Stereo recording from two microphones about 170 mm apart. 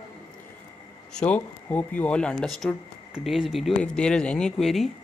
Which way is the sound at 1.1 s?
5° left (ahead or behind).